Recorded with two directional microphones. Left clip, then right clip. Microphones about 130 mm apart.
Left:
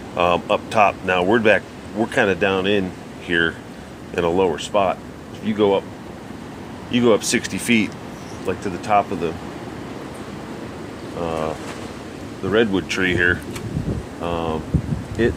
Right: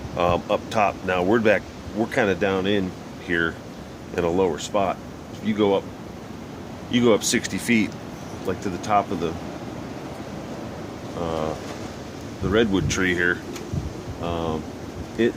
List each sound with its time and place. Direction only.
0.2 s speech: centre (ahead or behind)
6.9 s speech: 15° right (ahead or behind)
8.4 s speech: 10° right (ahead or behind)
11.2 s speech: 20° right (ahead or behind)